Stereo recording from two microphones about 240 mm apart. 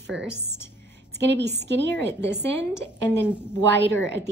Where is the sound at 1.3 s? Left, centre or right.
Right.